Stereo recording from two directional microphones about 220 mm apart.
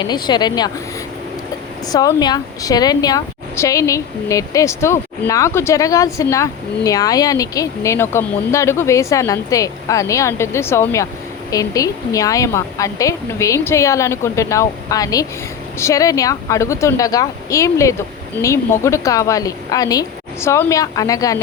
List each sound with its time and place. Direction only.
0.0 s speech: 20° left (ahead or behind)
1.9 s a woman's voice: 15° left (ahead or behind)